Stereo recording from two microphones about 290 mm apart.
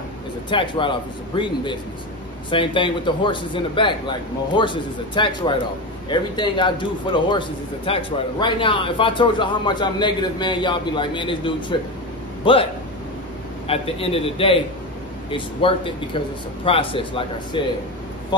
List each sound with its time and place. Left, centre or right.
0.5 s a man's voice: centre
13.7 s a man's voice: centre